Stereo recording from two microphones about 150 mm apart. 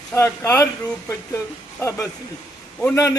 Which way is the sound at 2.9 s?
25° left (ahead or behind).